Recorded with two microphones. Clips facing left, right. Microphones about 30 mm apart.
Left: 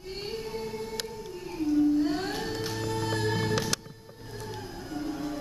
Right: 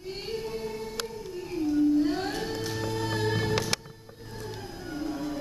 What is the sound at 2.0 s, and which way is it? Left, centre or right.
Music, centre.